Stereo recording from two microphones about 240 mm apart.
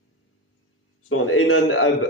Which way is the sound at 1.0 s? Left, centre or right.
Left.